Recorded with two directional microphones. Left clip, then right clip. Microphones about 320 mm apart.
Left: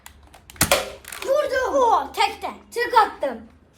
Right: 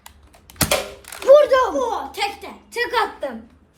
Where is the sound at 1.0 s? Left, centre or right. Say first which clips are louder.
Right 10 dB; centre.